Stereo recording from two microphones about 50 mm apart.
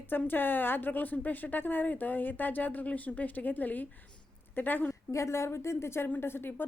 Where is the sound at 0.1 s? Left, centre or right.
Left.